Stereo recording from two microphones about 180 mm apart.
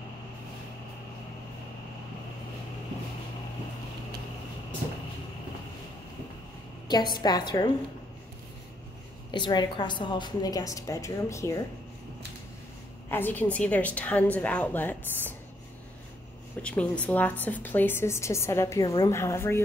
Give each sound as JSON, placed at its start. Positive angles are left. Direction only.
{"t": 6.9, "sound": "a woman's voice", "side_deg": 25}
{"t": 9.3, "sound": "a woman's voice", "side_deg": 25}
{"t": 13.1, "sound": "a woman's voice", "side_deg": 10}
{"t": 16.6, "sound": "a woman's voice", "side_deg": 5}